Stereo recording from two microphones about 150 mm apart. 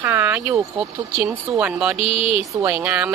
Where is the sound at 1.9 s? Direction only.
40° left (ahead or behind).